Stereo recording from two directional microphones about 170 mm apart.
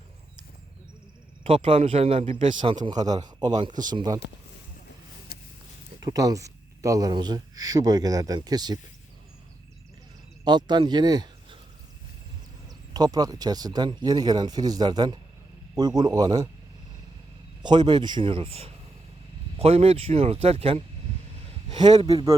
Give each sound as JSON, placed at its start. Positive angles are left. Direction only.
{"t": 1.5, "sound": "speech", "side_deg": -30}
{"t": 2.6, "sound": "speech", "side_deg": -30}
{"t": 6.0, "sound": "speech", "side_deg": -20}
{"t": 10.4, "sound": "speech", "side_deg": -25}
{"t": 12.6, "sound": "speech", "side_deg": -20}
{"t": 17.6, "sound": "speech", "side_deg": -25}
{"t": 22.0, "sound": "speech", "side_deg": -20}